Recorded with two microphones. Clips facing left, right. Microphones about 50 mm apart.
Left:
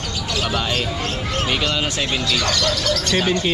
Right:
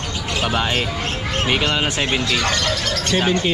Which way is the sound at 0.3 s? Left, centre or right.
Right.